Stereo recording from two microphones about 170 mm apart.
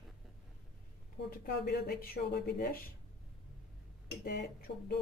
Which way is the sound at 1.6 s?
65° left (ahead or behind).